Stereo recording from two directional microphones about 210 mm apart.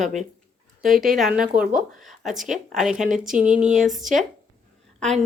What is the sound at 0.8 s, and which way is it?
A woman's voice, centre (ahead or behind).